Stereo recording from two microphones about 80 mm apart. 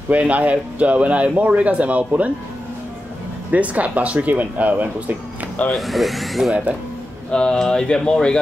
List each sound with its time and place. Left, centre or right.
0.1 s speech: centre
3.5 s speech: centre
5.8 s speech: centre
7.2 s speech: centre